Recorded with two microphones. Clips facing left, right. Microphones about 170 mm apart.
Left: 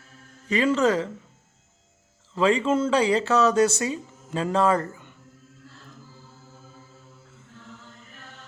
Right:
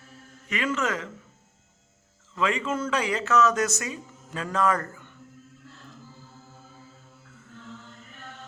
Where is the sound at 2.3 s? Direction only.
30° left (ahead or behind).